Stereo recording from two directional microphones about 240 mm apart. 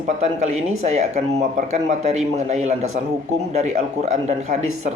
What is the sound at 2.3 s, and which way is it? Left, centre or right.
Speech, right.